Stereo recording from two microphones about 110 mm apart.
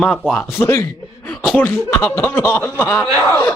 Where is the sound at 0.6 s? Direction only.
25° left (ahead or behind).